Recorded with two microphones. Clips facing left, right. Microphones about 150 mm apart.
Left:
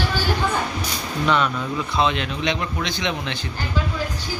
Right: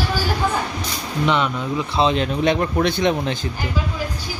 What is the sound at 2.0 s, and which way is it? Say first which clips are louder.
Speech: right 5 dB; 35° right (ahead or behind).